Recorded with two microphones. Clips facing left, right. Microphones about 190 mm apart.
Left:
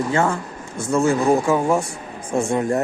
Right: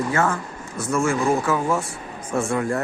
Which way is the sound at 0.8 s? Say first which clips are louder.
Left 3 dB; 25° left (ahead or behind).